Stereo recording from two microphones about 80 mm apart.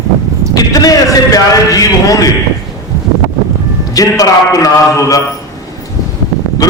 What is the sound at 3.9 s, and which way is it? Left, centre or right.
A man's voice, left.